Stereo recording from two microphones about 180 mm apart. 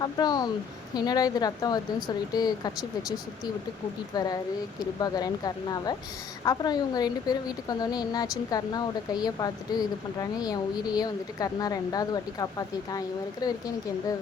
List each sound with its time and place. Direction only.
0.0 s a woman's voice: 20° left (ahead or behind)